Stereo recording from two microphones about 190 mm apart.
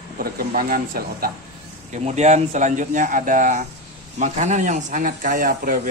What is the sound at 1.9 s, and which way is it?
Speech, 35° right (ahead or behind).